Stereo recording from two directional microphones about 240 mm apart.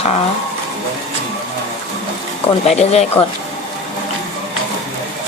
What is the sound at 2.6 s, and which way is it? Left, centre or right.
Speech, left.